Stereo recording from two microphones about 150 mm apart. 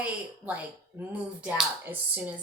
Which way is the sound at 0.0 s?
10° right (ahead or behind).